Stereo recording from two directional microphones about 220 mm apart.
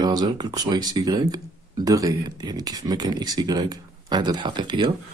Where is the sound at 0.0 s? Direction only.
20° right (ahead or behind).